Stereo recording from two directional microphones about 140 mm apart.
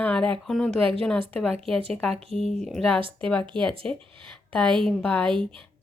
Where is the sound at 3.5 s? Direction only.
35° right (ahead or behind).